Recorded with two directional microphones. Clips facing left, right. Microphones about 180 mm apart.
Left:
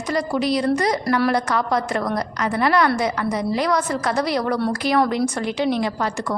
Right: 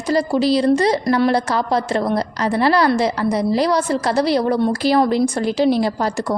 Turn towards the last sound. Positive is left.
turn(degrees=-35)  # may be behind; listen again after turning